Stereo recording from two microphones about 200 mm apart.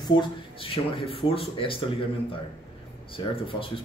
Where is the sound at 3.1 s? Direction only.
25° left (ahead or behind).